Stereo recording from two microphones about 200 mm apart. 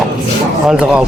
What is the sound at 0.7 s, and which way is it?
Speech, 5° right (ahead or behind).